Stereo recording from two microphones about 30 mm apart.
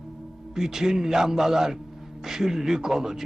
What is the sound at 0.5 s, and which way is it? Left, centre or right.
A man's voice, centre.